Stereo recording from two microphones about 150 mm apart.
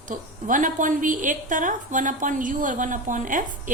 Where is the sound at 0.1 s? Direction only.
60° right (ahead or behind).